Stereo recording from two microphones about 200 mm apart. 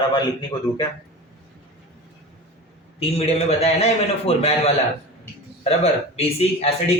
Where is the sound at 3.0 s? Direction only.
30° left (ahead or behind).